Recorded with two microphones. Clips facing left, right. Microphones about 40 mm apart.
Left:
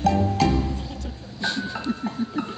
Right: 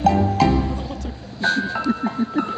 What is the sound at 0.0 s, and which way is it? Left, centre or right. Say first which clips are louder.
Music: right 4 dB; centre.